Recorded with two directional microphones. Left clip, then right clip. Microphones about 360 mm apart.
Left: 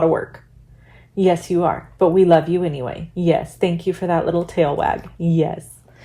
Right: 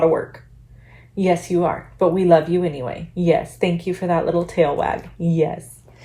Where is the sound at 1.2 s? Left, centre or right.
Left.